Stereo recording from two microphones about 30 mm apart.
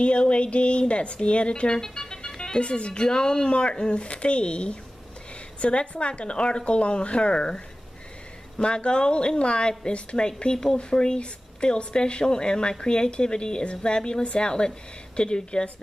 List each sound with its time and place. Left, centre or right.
0.0 s a woman's voice: left